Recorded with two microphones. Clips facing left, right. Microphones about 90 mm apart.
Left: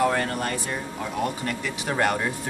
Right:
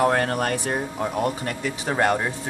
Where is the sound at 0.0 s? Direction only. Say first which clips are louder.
Right 3 dB; 60° right (ahead or behind).